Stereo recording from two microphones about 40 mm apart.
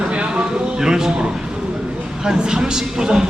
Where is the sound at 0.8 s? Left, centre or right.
Centre.